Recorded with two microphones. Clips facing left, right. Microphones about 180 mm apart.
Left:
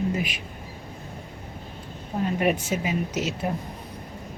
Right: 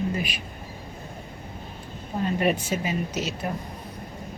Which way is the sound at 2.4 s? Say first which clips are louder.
Left 1 dB; 15° left (ahead or behind).